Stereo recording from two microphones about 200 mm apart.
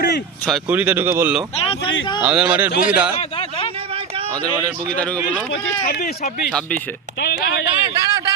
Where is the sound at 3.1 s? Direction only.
25° left (ahead or behind).